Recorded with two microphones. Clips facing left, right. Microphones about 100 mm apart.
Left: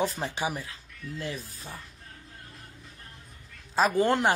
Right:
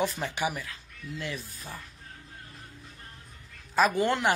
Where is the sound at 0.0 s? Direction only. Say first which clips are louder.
Even; 30° left (ahead or behind).